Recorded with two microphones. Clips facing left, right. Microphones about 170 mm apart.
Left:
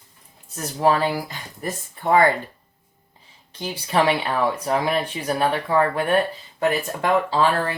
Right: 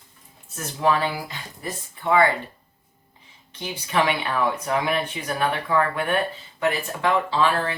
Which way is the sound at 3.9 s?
35° left (ahead or behind).